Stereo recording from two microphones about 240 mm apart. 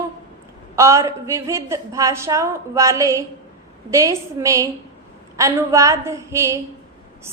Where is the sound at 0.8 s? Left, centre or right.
Centre.